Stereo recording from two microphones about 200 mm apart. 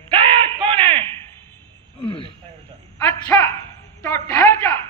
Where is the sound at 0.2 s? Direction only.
25° right (ahead or behind).